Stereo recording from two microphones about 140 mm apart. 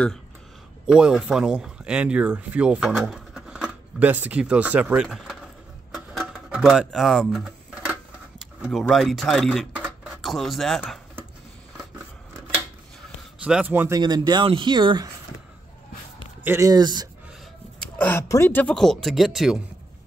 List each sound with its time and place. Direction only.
0.8 s speech: 5° right (ahead or behind)
5.0 s speech: centre (ahead or behind)
5.9 s a sound: 5° right (ahead or behind)
8.5 s speech: 5° right (ahead or behind)
13.4 s a man's voice: 10° right (ahead or behind)
13.9 s speech: 30° right (ahead or behind)
16.4 s speech: 20° right (ahead or behind)
17.9 s speech: 10° left (ahead or behind)